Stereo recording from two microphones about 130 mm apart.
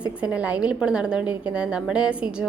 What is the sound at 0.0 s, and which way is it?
A woman's voice, 10° right (ahead or behind).